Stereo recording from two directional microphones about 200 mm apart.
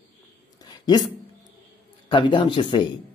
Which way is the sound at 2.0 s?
25° left (ahead or behind).